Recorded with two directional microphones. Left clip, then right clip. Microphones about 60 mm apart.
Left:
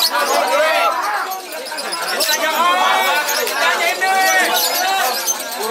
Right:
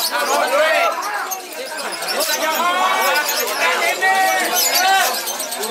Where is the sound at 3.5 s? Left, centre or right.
Centre.